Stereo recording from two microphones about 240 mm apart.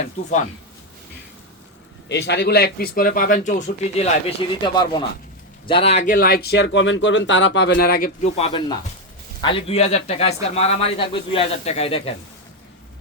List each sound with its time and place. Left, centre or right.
0.0 s speech: left
2.0 s speech: left
4.6 s speech: centre